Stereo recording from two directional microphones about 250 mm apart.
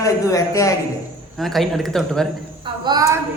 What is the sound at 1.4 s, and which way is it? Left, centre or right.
Speech, centre.